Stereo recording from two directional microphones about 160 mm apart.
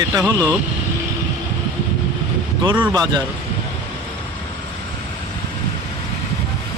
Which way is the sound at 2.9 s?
25° right (ahead or behind).